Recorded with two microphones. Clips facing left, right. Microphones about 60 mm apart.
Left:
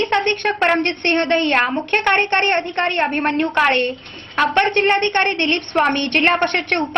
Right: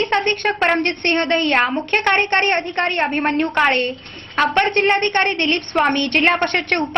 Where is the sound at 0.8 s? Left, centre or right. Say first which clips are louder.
Even; left.